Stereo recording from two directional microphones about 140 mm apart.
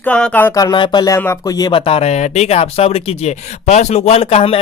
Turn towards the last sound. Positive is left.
turn(degrees=40)  # may be behind; listen again after turning